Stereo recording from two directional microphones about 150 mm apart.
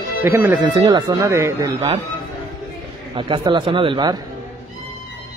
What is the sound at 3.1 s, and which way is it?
Speech, 35° right (ahead or behind).